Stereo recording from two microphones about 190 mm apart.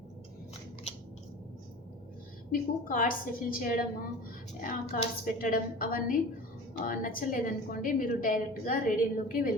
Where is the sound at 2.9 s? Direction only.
45° left (ahead or behind).